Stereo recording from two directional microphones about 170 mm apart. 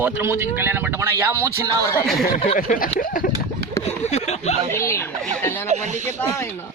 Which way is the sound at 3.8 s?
40° left (ahead or behind).